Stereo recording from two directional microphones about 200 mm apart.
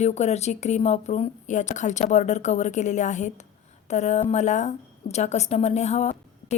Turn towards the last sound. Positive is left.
turn(degrees=35)  # may be behind; listen again after turning